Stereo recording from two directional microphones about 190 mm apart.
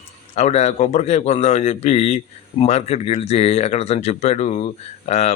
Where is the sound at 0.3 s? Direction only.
35° left (ahead or behind).